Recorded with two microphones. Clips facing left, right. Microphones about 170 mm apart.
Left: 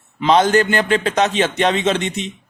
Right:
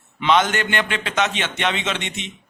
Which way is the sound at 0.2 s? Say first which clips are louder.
Left 5 dB; 35° left (ahead or behind).